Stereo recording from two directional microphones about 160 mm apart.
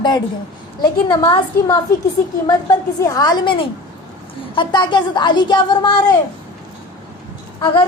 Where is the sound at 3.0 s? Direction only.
20° left (ahead or behind).